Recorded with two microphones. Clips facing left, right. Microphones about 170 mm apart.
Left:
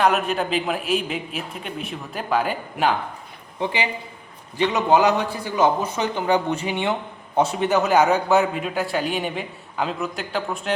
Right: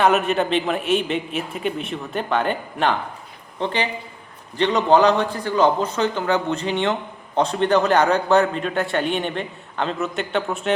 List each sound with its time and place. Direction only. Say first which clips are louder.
0.0 s a man's voice: right 2 dB; centre (ahead or behind)